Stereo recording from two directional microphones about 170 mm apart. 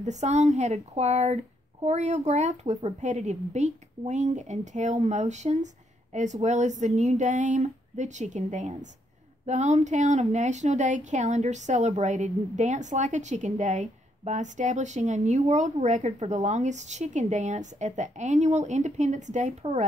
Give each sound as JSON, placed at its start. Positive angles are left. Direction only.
{"t": 0.0, "sound": "speech", "side_deg": -40}